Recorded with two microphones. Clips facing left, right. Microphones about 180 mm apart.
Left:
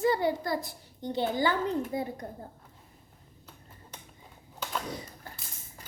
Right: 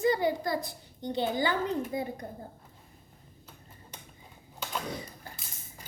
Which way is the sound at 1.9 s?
35° left (ahead or behind).